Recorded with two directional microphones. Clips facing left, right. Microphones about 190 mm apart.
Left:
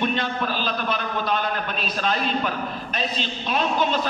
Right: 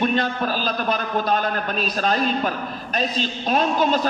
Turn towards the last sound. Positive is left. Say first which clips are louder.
# right 3 dB
turn(degrees=-40)  # may be behind; listen again after turning